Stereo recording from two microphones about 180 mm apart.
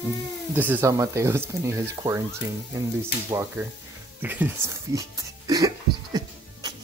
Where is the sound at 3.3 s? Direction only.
15° right (ahead or behind).